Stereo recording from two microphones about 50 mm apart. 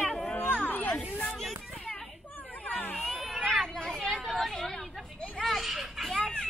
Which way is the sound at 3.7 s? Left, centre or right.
Centre.